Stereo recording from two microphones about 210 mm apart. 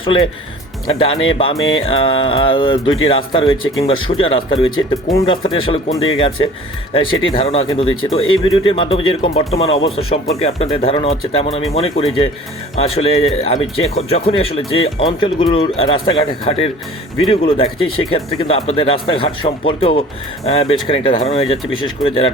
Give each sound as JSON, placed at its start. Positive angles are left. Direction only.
{"t": 0.0, "sound": "speech", "side_deg": 25}